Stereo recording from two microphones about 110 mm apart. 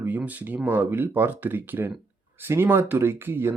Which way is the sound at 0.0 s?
15° right (ahead or behind).